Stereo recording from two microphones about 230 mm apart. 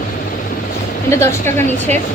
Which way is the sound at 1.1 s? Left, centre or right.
Centre.